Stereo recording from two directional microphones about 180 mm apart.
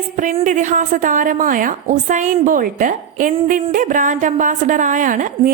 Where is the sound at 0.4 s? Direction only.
45° right (ahead or behind).